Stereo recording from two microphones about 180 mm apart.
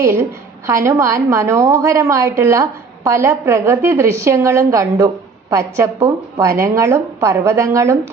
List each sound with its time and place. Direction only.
0.0 s a woman's voice: 15° right (ahead or behind)